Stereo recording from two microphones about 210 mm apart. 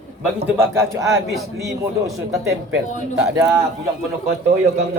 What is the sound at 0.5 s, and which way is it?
Speech, 10° right (ahead or behind).